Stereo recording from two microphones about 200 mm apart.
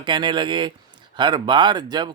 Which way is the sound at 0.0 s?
20° right (ahead or behind).